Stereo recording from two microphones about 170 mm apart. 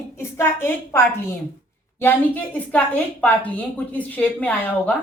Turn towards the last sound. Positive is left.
turn(degrees=10)  # may be behind; listen again after turning